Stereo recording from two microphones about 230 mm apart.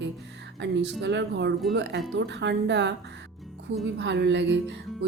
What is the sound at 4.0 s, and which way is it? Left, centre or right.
Speech, right.